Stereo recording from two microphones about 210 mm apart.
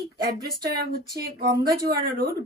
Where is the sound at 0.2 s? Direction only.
50° right (ahead or behind).